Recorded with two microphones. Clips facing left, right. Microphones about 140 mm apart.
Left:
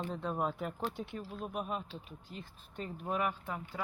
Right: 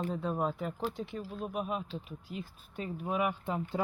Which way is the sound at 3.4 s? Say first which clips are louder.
Right 7 dB; 20° right (ahead or behind).